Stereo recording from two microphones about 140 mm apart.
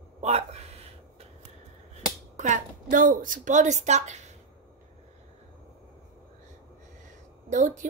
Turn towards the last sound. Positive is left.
turn(degrees=-60)  # may be behind; listen again after turning